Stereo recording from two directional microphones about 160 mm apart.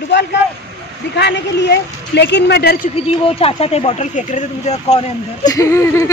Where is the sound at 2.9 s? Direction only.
35° left (ahead or behind).